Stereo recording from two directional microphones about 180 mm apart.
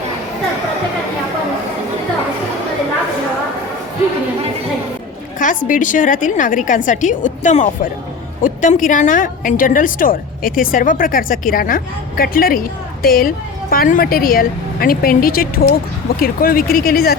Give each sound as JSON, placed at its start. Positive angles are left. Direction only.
{"t": 5.4, "sound": "a woman's voice", "side_deg": 45}